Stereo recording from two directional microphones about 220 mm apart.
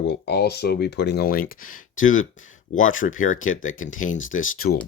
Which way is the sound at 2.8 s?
65° left (ahead or behind).